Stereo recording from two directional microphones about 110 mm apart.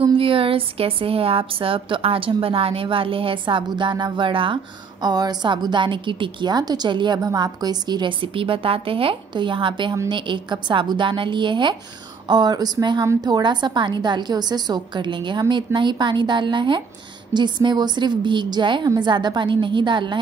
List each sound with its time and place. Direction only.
0.0 s a woman's voice: 55° right (ahead or behind)
5.0 s a woman's voice: 35° right (ahead or behind)